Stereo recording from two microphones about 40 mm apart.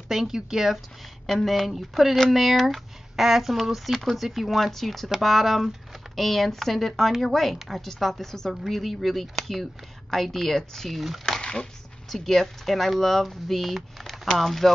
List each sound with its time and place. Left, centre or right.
0.1 s speech: centre
1.3 s speech: centre
11.2 s a sound: centre
12.1 s speech: centre